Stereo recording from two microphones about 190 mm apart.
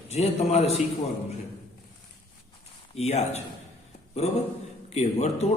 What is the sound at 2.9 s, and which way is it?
A man's voice, 35° left (ahead or behind).